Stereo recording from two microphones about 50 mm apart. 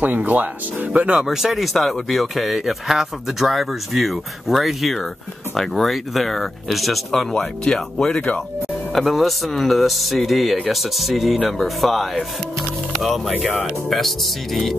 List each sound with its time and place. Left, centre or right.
0.0 s speech: right
1.2 s speech: centre
8.9 s speech: centre